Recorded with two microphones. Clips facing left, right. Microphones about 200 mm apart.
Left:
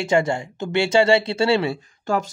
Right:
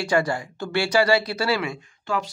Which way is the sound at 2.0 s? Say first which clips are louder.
Left 4 dB; 45° left (ahead or behind).